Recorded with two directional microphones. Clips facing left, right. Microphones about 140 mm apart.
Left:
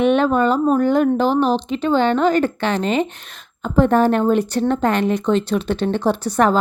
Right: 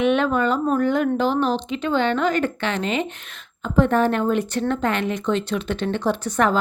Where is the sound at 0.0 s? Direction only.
35° left (ahead or behind).